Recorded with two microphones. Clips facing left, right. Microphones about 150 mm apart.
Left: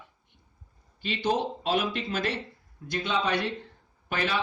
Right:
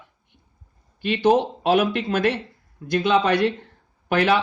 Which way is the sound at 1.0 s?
60° right (ahead or behind).